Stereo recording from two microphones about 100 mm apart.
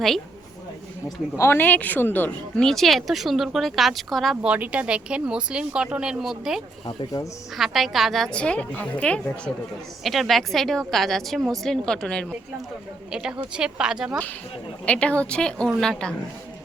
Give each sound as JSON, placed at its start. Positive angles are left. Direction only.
{"t": 1.4, "sound": "a woman's voice", "side_deg": 25}
{"t": 2.6, "sound": "a woman's voice", "side_deg": 5}
{"t": 4.4, "sound": "a woman's voice", "side_deg": -15}
{"t": 10.0, "sound": "a woman's voice", "side_deg": 0}
{"t": 13.1, "sound": "speech", "side_deg": -10}
{"t": 14.8, "sound": "a woman's voice", "side_deg": 10}